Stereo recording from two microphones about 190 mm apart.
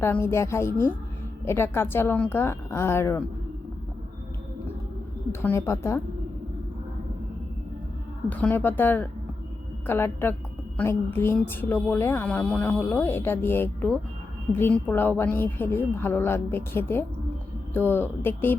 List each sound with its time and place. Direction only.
0.0 s speech: 15° left (ahead or behind)
5.3 s speech: 10° left (ahead or behind)
8.3 s speech: 10° left (ahead or behind)